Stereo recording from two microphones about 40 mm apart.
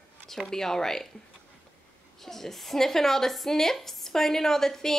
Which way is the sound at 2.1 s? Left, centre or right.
Centre.